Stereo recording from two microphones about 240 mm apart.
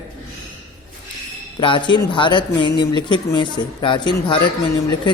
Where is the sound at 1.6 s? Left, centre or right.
Centre.